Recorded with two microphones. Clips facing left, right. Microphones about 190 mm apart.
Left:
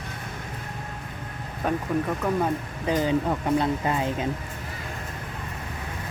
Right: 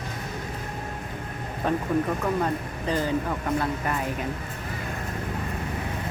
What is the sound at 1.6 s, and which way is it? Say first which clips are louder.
Speech: right 1 dB; centre (ahead or behind).